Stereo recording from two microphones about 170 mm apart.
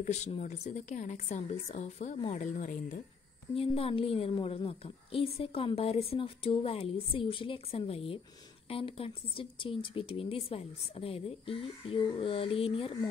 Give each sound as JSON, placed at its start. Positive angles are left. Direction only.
{"t": 0.0, "sound": "a woman's voice", "side_deg": 40}
{"t": 3.5, "sound": "a woman's voice", "side_deg": 35}